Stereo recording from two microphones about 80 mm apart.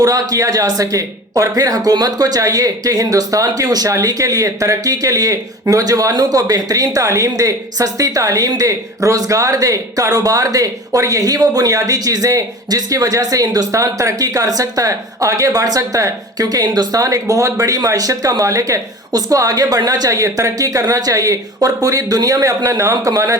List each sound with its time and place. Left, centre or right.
0.0 s speech: right